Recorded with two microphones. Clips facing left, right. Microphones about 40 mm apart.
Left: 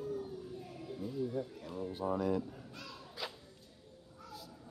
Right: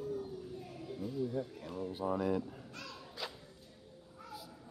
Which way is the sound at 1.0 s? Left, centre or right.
Centre.